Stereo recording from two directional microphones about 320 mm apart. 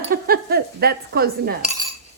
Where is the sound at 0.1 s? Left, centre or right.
Right.